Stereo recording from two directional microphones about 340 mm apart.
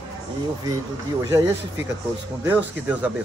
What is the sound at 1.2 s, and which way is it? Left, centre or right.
Speech, centre.